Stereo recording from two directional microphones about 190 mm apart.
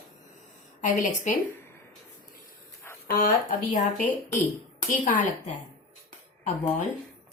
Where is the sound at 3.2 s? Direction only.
45° left (ahead or behind).